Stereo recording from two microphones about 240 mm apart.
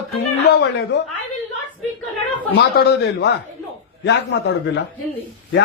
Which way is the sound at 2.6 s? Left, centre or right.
Left.